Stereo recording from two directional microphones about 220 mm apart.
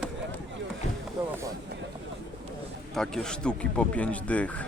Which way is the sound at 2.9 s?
Centre (ahead or behind).